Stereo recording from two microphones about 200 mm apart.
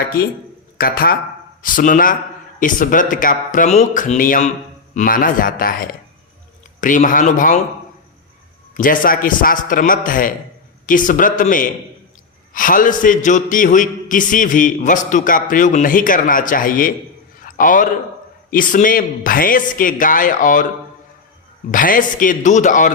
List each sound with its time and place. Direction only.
0.1 s a man's voice: 45° left (ahead or behind)
8.7 s a man's voice: 45° left (ahead or behind)
17.4 s a sound: 45° left (ahead or behind)
18.5 s speech: 45° left (ahead or behind)
21.7 s a man's voice: 45° left (ahead or behind)